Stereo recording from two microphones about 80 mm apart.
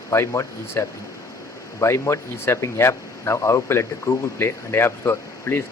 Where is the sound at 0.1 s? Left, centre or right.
Left.